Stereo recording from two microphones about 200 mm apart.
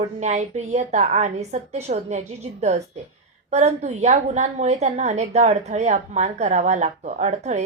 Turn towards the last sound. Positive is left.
turn(degrees=-35)  # may be behind; listen again after turning